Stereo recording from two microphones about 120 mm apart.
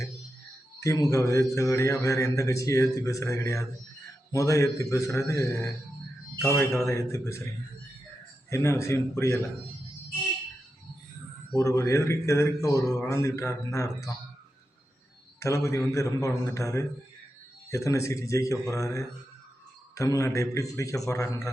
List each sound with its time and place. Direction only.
0.8 s speech: 25° left (ahead or behind)
8.4 s speech: 25° left (ahead or behind)
11.5 s speech: 25° left (ahead or behind)
15.4 s speech: 25° left (ahead or behind)